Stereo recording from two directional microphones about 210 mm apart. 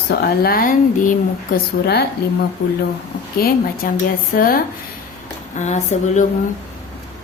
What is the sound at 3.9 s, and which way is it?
Speech, 45° left (ahead or behind).